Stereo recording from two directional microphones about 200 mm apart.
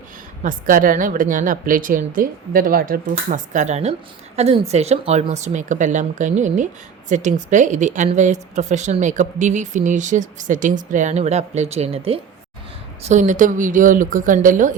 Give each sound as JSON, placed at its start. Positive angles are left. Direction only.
{"t": 0.4, "sound": "a woman's voice", "side_deg": -45}